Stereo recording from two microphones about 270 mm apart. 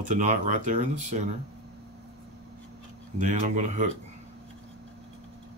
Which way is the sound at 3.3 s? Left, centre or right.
Right.